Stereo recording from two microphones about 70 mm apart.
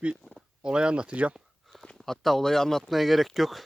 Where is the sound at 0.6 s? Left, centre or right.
Centre.